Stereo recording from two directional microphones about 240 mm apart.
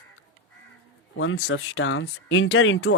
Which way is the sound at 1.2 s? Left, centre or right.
Left.